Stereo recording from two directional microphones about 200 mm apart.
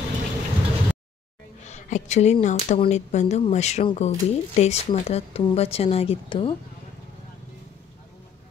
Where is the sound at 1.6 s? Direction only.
35° left (ahead or behind).